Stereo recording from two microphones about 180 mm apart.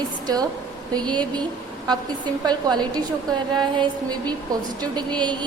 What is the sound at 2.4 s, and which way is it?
A woman's voice, 20° right (ahead or behind).